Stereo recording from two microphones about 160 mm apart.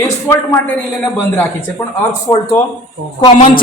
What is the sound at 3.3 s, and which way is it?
Speech, 55° left (ahead or behind).